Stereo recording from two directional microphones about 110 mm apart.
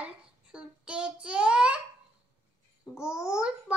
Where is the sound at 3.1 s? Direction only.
5° right (ahead or behind).